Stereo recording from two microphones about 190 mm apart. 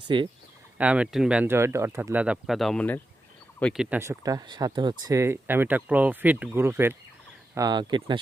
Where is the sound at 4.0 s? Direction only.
15° right (ahead or behind).